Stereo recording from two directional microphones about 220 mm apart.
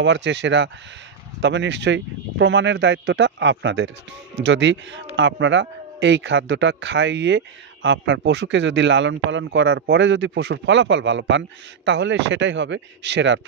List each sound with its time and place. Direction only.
0.0 s speech: 55° right (ahead or behind)